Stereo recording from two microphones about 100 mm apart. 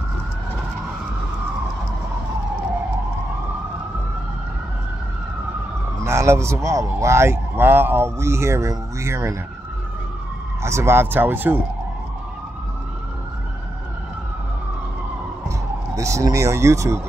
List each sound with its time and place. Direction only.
5.9 s a man's voice: 30° right (ahead or behind)
10.6 s a man's voice: 25° right (ahead or behind)
16.0 s a man's voice: 30° right (ahead or behind)